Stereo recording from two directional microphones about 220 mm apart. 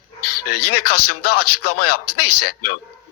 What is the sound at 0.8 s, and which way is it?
Speech, 45° left (ahead or behind).